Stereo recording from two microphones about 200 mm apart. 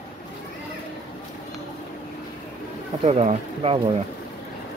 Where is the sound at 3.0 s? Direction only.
30° right (ahead or behind).